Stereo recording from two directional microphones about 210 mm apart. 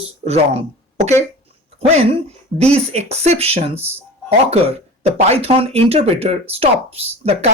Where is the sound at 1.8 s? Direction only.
30° right (ahead or behind).